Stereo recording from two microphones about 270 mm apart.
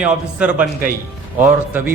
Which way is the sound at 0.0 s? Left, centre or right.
Centre.